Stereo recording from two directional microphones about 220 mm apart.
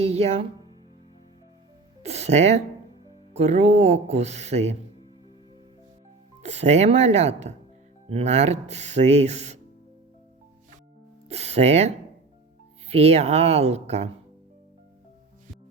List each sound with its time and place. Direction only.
0.0 s speech: 30° right (ahead or behind)
2.0 s speech: 30° right (ahead or behind)
6.4 s speech: 30° right (ahead or behind)
11.3 s music: 30° right (ahead or behind)
12.9 s speech: 25° right (ahead or behind)